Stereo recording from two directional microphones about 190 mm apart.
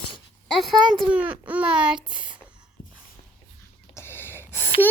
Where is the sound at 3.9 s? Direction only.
10° left (ahead or behind).